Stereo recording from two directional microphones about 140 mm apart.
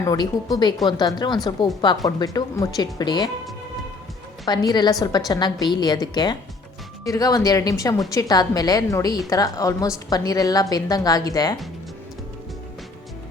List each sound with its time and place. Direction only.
0.0 s a woman's voice: 25° left (ahead or behind)
4.4 s a woman's voice: 30° left (ahead or behind)